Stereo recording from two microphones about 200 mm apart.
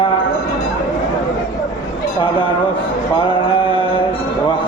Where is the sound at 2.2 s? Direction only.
25° left (ahead or behind).